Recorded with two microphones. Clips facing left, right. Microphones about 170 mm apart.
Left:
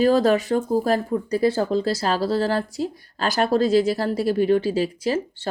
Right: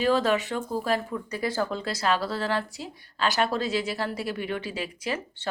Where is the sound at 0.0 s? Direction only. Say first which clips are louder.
Left 6 dB; 40° left (ahead or behind).